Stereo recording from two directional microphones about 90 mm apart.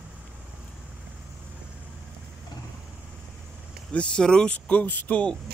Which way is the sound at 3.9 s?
10° left (ahead or behind).